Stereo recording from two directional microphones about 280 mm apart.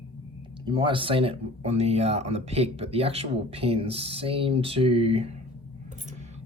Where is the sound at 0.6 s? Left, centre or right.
Centre.